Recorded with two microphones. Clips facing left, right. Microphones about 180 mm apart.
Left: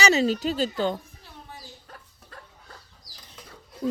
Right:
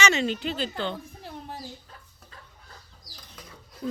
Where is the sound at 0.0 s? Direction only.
35° left (ahead or behind).